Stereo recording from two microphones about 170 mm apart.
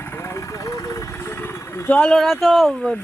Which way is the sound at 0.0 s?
15° left (ahead or behind).